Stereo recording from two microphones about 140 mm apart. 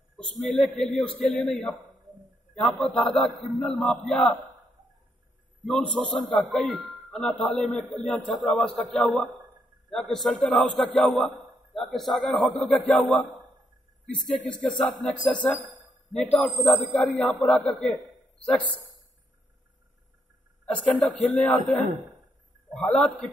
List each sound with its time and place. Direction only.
0.2 s speech: 5° left (ahead or behind)
1.9 s a sound: 65° right (ahead or behind)
2.5 s speech: 5° left (ahead or behind)
5.7 s speech: centre (ahead or behind)
21.2 s speech: 10° left (ahead or behind)